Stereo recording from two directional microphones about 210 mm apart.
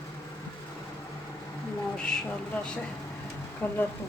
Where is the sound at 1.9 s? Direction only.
5° left (ahead or behind).